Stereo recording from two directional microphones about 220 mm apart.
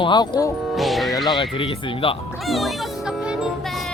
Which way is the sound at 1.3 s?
25° left (ahead or behind).